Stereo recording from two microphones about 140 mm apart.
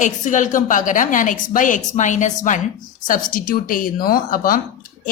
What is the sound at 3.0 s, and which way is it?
Speech, 80° left.